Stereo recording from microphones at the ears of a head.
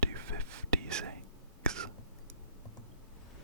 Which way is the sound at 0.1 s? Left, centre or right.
Right.